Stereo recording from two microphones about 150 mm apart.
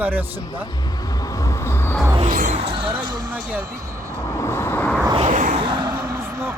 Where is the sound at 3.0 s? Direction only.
30° right (ahead or behind).